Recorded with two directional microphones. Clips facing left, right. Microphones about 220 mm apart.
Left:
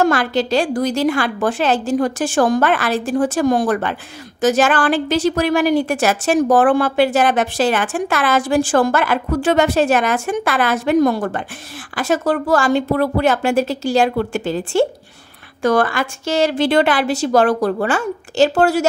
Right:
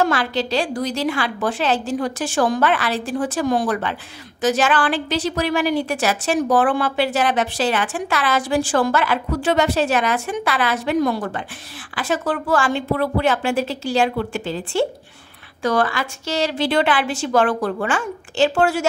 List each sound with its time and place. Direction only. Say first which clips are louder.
0.0 s a woman's voice: left 4 dB; 45° left (ahead or behind)